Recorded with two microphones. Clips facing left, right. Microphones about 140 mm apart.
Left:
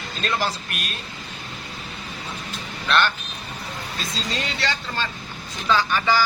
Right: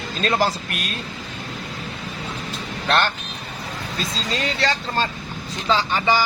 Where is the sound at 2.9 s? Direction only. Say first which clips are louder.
Right 1 dB; 40° right (ahead or behind).